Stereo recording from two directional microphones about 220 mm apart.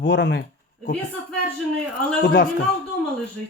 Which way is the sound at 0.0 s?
55° left (ahead or behind).